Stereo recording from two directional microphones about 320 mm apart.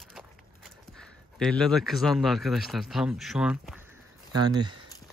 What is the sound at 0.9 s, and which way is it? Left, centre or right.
Speech, centre.